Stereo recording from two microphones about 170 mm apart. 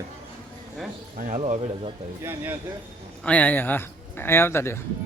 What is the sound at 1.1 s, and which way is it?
Speech, 50° right (ahead or behind).